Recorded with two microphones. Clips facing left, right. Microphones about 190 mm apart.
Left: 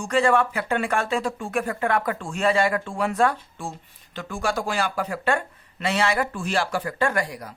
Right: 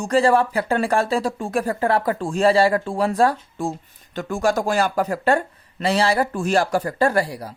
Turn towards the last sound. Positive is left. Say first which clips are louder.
# right 5 dB
turn(degrees=-30)  # may be behind; listen again after turning